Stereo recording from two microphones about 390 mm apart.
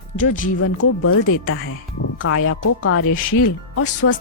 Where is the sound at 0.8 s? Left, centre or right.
Left.